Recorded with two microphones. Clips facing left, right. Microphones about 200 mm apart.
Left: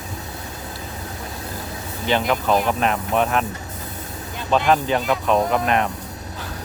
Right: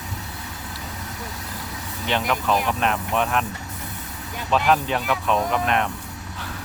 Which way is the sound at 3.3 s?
Centre (ahead or behind).